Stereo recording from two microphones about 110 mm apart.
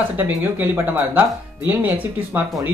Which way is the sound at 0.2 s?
15° right (ahead or behind).